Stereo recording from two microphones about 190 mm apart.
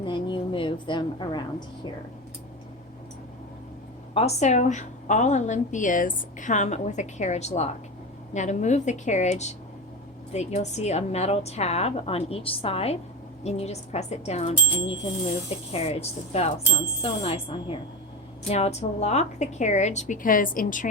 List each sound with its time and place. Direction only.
0.0 s a woman's voice: 25° left (ahead or behind)
4.1 s a woman's voice: 35° left (ahead or behind)